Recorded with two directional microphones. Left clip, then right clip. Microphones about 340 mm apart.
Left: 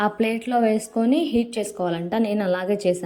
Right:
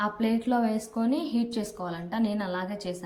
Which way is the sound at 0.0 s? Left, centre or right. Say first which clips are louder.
Left 6 dB; centre.